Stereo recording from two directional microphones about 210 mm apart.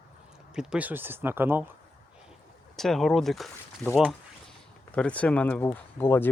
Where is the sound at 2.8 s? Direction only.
Centre (ahead or behind).